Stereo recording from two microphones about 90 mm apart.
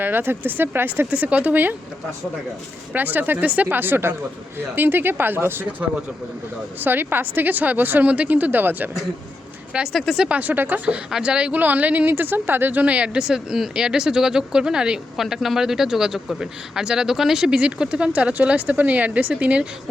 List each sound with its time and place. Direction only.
0.0 s a woman's voice: 25° right (ahead or behind)
2.9 s a woman's voice: 20° right (ahead or behind)
6.7 s a woman's voice: 20° right (ahead or behind)
9.9 s speech: centre (ahead or behind)
10.2 s a woman's voice: 15° right (ahead or behind)